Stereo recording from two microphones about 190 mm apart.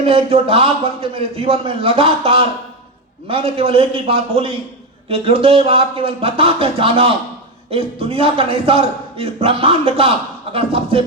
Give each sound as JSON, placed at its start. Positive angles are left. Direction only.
{"t": 0.0, "sound": "a man's voice", "side_deg": -30}